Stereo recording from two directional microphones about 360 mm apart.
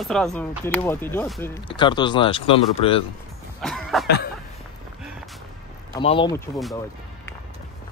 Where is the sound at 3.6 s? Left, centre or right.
Centre.